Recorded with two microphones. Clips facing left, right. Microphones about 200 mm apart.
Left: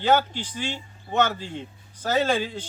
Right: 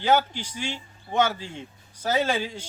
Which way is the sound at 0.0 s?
10° right (ahead or behind).